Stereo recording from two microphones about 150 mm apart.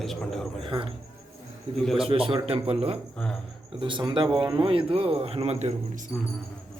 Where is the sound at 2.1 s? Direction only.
35° right (ahead or behind).